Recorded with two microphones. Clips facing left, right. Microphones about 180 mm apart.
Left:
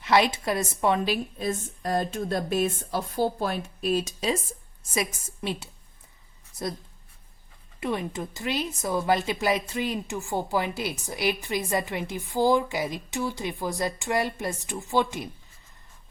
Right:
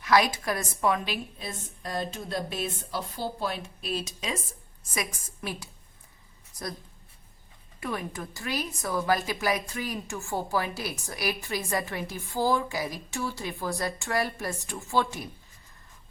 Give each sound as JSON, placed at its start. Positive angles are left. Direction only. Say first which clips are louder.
{"t": 0.0, "sound": "a woman's voice", "louder": "left 1 dB", "side_deg": 25}
{"t": 4.9, "sound": "speech", "louder": "left 5 dB", "side_deg": 25}
{"t": 7.8, "sound": "speech", "louder": "left 4 dB", "side_deg": 20}